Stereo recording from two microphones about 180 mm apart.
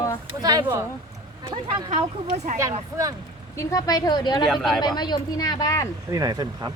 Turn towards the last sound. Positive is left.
turn(degrees=-20)  # may be behind; listen again after turning